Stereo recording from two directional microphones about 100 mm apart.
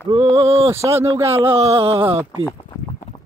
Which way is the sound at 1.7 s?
75° right (ahead or behind).